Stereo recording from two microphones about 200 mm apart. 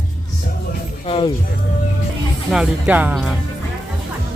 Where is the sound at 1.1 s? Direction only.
25° left (ahead or behind).